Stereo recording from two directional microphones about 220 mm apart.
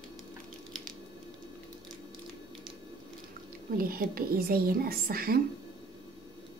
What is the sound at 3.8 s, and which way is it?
Speech, 40° right (ahead or behind).